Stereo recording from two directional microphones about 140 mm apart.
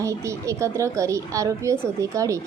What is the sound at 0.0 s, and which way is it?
A woman's voice, 20° right (ahead or behind).